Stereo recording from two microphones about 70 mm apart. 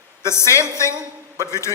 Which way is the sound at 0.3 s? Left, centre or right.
Left.